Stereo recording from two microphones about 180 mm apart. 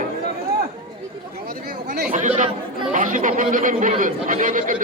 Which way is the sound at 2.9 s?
45° right (ahead or behind).